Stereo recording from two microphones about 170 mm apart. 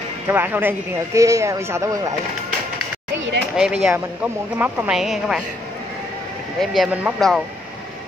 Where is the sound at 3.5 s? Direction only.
5° right (ahead or behind).